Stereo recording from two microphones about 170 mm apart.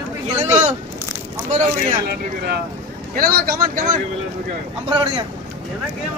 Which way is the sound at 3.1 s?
60° right (ahead or behind).